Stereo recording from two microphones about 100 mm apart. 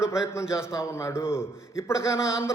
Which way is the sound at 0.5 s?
30° left (ahead or behind).